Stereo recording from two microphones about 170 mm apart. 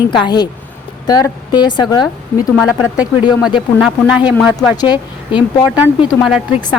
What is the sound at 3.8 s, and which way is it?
Speech, 5° right (ahead or behind).